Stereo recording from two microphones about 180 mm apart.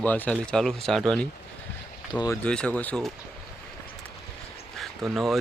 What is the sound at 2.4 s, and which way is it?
Speech, 5° left (ahead or behind).